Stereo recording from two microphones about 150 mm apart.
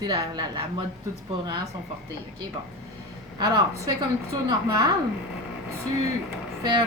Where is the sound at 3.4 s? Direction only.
30° right (ahead or behind).